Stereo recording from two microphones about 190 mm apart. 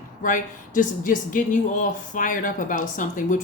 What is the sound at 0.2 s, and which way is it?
Speech, 45° left (ahead or behind).